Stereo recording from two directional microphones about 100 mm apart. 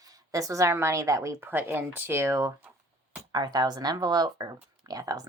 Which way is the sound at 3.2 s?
45° right (ahead or behind).